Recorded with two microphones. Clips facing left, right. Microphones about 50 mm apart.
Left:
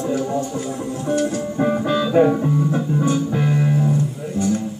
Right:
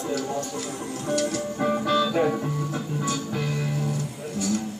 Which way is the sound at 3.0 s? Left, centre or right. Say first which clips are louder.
Left 7 dB; left.